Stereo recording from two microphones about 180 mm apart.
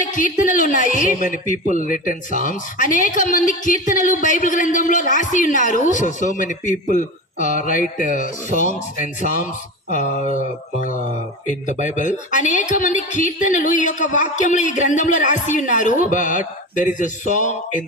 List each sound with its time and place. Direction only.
0.0 s a woman's voice: 45° left (ahead or behind)
11.4 s a woman's voice: 45° left (ahead or behind)